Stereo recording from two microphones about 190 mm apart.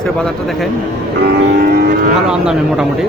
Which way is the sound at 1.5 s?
55° right (ahead or behind).